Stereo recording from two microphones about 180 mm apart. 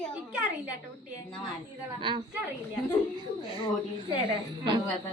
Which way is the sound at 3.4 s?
30° left (ahead or behind).